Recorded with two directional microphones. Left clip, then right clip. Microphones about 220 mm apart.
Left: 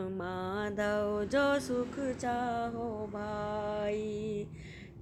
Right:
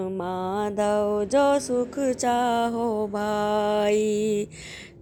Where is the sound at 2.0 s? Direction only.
40° right (ahead or behind).